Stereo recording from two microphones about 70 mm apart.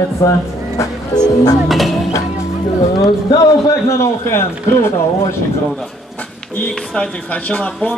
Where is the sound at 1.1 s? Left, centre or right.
Left.